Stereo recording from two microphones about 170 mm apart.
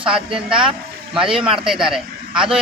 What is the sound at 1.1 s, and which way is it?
A man's voice, 5° right (ahead or behind).